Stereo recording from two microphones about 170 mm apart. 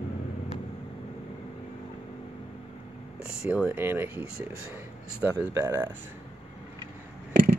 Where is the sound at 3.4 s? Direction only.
5° right (ahead or behind).